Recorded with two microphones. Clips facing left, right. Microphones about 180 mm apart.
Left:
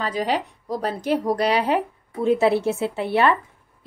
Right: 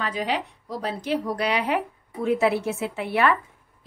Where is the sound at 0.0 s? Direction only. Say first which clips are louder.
Left 3 dB; 40° left (ahead or behind).